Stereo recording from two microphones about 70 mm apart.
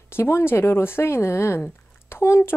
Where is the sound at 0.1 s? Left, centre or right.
Left.